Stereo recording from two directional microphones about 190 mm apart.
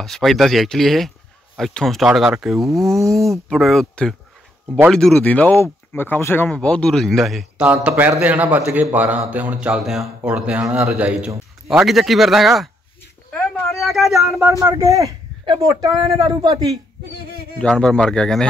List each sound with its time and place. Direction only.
0.0 s speech: centre (ahead or behind)
13.3 s a sound: 5° left (ahead or behind)
14.6 s a man's voice: 15° right (ahead or behind)
17.6 s speech: 5° left (ahead or behind)